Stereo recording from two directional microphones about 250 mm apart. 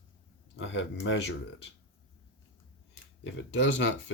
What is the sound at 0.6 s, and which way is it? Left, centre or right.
Speech, left.